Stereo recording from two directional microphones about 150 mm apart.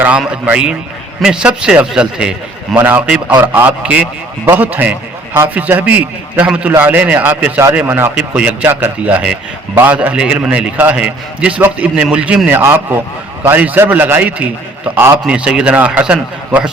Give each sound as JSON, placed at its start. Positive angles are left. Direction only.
{"t": 0.0, "sound": "a man's voice", "side_deg": -10}